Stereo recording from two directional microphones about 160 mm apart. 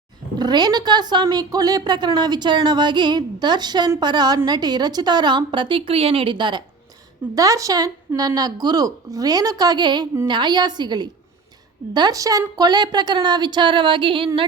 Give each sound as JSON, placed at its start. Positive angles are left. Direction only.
{"t": 0.3, "sound": "a woman's voice", "side_deg": -25}